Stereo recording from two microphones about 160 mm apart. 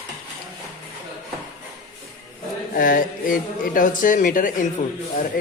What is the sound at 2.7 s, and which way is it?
Speech, 60° left (ahead or behind).